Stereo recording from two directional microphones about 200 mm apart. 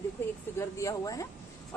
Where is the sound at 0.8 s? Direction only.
15° left (ahead or behind).